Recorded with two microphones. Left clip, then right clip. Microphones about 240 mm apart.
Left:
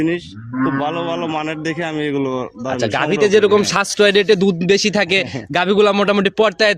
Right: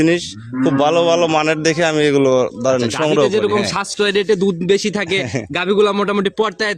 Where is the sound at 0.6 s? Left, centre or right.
Right.